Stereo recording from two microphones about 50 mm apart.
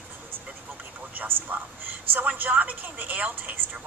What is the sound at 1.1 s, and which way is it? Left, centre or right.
A woman's voice, right.